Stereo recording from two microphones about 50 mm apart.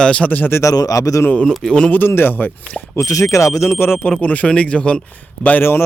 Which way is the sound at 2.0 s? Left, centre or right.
Left.